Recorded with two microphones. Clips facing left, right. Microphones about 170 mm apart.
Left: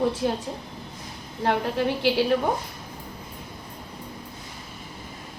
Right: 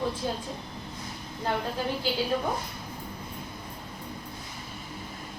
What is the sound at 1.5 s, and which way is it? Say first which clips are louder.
Speech: left 6 dB; 75° left (ahead or behind).